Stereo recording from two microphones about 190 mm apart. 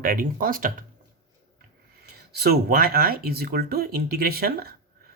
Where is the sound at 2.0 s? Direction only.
55° right (ahead or behind).